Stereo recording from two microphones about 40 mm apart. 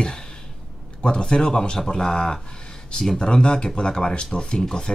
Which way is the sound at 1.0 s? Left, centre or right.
Left.